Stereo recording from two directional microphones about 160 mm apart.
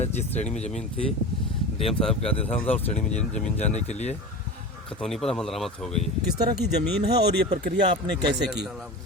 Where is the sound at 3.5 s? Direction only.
45° left (ahead or behind).